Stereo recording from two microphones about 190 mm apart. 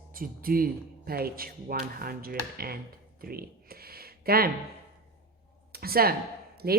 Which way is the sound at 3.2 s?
50° right (ahead or behind).